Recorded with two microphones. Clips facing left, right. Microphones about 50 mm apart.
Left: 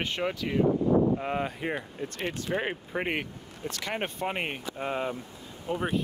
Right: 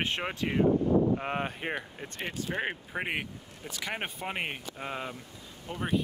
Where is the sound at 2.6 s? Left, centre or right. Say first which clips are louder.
Left 1 dB; centre.